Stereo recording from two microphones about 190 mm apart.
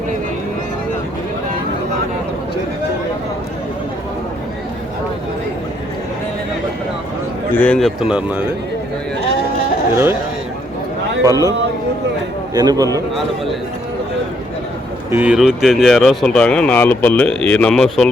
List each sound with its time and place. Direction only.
7.5 s speech: 5° left (ahead or behind)
9.9 s speech: 15° right (ahead or behind)
11.3 s a man's voice: 20° right (ahead or behind)
12.5 s a man's voice: 20° right (ahead or behind)
15.1 s speech: 5° right (ahead or behind)